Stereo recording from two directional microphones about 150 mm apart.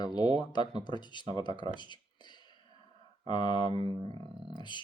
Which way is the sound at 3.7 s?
35° right (ahead or behind).